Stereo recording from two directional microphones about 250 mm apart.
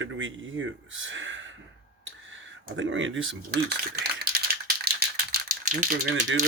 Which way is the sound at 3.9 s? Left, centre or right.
Right.